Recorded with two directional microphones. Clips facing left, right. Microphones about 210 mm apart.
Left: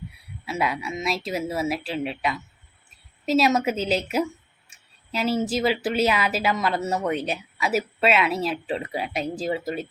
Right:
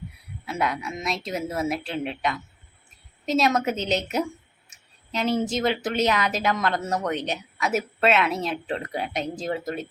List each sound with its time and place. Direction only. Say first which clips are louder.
0.4 s speech: left 1 dB; 5° left (ahead or behind)
4.7 s a sound: even; 5° left (ahead or behind)
5.8 s speech: left 1 dB; 5° left (ahead or behind)